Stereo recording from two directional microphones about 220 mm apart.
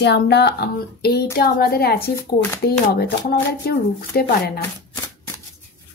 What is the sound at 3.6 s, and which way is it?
Speech, 45° left (ahead or behind).